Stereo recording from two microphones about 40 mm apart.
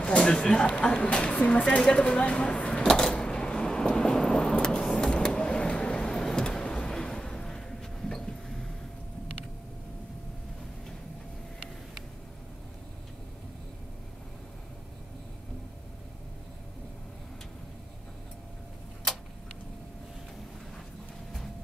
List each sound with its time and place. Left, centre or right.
0.0 s a woman's voice: centre
1.8 s a sound: centre
5.0 s vehicle: left